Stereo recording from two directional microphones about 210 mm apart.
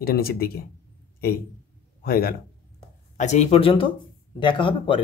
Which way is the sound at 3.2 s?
30° left (ahead or behind).